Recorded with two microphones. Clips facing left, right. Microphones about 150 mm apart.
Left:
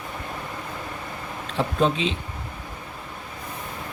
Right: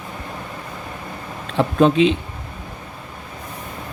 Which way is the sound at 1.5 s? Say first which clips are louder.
Right 8 dB; 65° right (ahead or behind).